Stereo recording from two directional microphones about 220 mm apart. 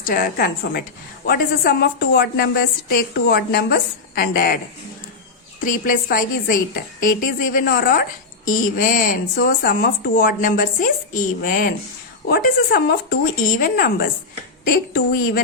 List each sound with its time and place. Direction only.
0.0 s a woman's voice: 40° left (ahead or behind)